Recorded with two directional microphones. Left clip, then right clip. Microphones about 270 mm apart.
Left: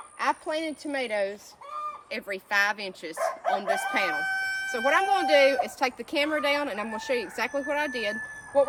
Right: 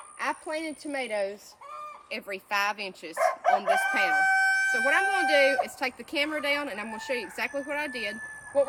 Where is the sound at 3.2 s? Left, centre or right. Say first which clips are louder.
Right 4 dB; right.